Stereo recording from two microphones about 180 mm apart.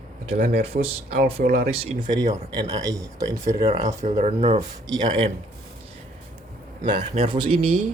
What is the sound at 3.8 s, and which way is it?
A man's voice, 40° right (ahead or behind).